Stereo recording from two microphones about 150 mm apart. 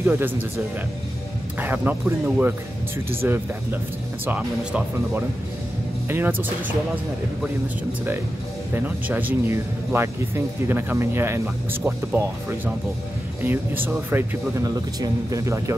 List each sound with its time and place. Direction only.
0.0 s speech: 15° right (ahead or behind)
1.6 s speech: 15° right (ahead or behind)
8.7 s speech: 10° right (ahead or behind)